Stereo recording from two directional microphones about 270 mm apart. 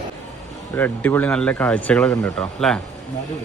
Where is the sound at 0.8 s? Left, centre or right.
Centre.